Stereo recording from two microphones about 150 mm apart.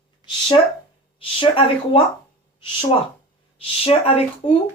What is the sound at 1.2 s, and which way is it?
Speech, 35° left (ahead or behind).